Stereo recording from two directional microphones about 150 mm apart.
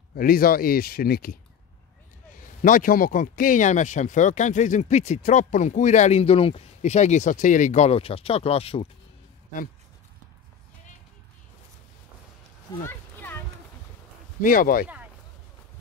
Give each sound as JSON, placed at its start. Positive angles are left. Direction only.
{"t": 0.1, "sound": "speech", "side_deg": 75}
{"t": 2.6, "sound": "speech", "side_deg": 65}
{"t": 12.8, "sound": "a sound", "side_deg": 15}
{"t": 14.4, "sound": "speech", "side_deg": 65}